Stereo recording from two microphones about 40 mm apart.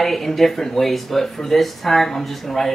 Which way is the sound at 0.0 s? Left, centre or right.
Centre.